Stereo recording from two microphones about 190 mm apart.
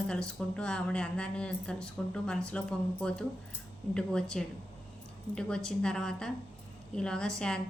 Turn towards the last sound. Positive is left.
turn(degrees=5)  # may be behind; listen again after turning